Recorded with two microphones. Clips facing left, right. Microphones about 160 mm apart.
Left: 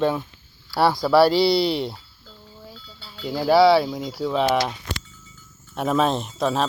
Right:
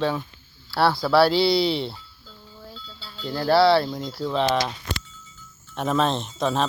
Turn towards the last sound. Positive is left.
turn(degrees=5)  # may be behind; listen again after turning